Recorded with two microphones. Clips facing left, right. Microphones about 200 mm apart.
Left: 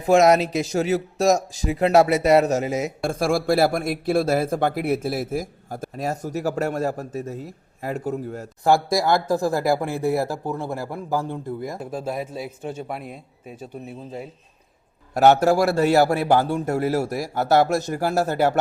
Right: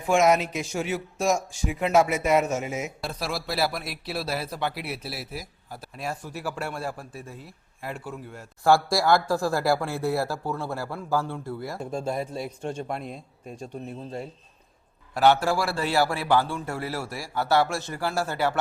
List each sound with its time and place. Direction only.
0.0 s speech: 35° left (ahead or behind)
3.0 s speech: 50° left (ahead or behind)
8.6 s speech: 20° left (ahead or behind)
11.8 s a man's voice: 5° left (ahead or behind)
15.1 s speech: 45° left (ahead or behind)